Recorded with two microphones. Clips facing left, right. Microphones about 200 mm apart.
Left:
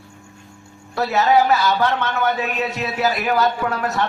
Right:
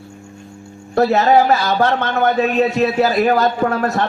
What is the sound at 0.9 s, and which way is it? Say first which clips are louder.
A man's voice: right 4 dB; 50° right (ahead or behind).